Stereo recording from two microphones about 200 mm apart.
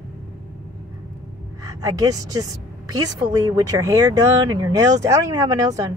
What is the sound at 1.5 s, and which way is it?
A woman's voice, 15° right (ahead or behind).